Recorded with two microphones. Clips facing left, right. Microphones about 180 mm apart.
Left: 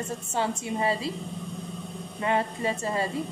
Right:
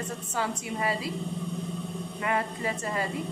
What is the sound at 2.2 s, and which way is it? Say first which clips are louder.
Speech: left 3 dB; 30° left (ahead or behind).